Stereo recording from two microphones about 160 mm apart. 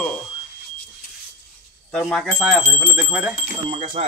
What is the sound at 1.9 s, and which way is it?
Speech, 5° left (ahead or behind).